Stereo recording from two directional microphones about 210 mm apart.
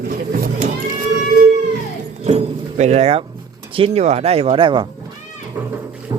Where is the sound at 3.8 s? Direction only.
30° right (ahead or behind).